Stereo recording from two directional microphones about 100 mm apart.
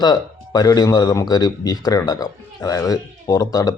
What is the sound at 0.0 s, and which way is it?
Speech, 40° left (ahead or behind).